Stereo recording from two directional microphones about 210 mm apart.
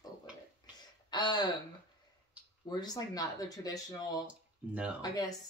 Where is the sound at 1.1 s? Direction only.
20° left (ahead or behind).